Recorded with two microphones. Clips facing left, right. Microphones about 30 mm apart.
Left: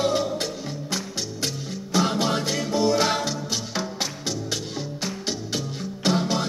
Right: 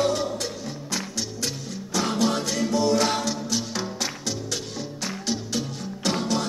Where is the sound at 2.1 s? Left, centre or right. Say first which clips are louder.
Even; centre.